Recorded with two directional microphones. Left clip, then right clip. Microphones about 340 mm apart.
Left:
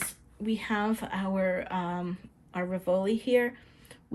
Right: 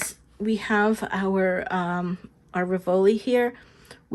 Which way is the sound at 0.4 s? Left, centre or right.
Centre.